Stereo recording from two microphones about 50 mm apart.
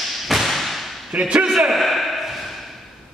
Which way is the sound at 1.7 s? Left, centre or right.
Centre.